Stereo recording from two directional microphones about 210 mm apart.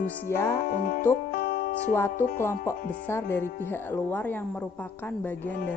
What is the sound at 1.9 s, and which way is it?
A woman's voice, 10° left (ahead or behind).